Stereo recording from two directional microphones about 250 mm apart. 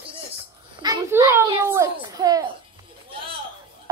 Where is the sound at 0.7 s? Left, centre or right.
Centre.